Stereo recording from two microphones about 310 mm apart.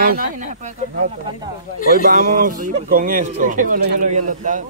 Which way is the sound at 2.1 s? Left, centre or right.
Right.